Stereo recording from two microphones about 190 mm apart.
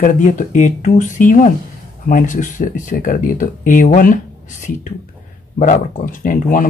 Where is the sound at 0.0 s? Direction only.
45° left (ahead or behind).